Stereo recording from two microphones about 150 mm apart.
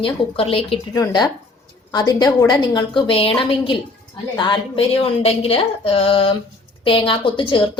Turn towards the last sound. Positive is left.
turn(degrees=35)  # may be behind; listen again after turning